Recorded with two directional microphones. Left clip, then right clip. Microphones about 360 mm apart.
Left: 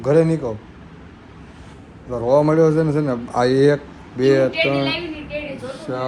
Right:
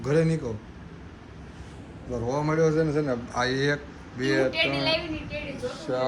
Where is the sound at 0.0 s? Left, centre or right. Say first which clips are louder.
Left 9 dB; centre.